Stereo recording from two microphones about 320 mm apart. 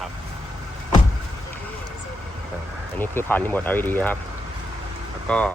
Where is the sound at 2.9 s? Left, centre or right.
Centre.